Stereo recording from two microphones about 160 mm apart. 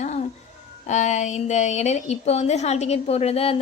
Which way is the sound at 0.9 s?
45° left (ahead or behind).